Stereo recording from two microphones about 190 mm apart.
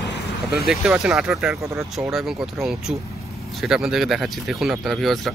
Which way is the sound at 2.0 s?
Centre (ahead or behind).